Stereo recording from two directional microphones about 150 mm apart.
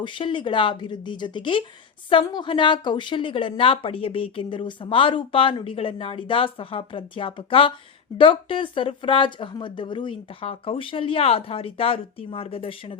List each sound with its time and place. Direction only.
0.0 s a woman's voice: 35° left (ahead or behind)